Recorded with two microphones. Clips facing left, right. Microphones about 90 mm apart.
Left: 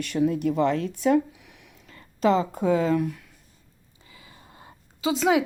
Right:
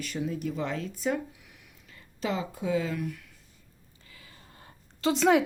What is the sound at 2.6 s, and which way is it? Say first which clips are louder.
Speech: left 7 dB; 40° left (ahead or behind).